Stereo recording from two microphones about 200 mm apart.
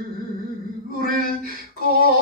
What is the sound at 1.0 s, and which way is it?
Speech, 45° right (ahead or behind).